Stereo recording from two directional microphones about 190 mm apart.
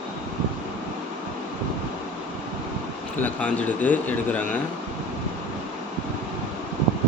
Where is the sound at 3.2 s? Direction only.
5° left (ahead or behind).